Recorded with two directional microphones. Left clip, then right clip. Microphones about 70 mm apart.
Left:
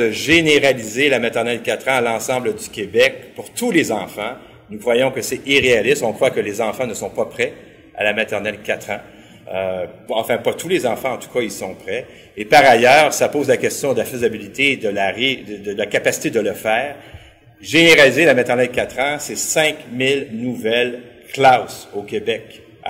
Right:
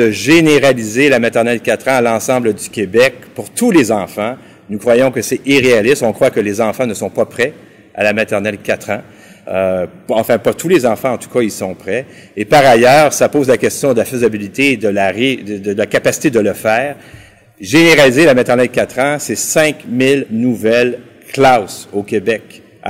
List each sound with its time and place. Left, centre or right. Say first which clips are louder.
0.0 s a man's voice: right 5 dB; right
21.5 s a man's voice: right 6 dB; right